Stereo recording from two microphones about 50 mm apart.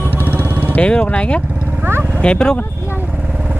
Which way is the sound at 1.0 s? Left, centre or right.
Left.